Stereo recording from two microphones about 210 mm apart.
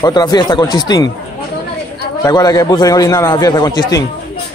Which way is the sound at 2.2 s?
20° left (ahead or behind).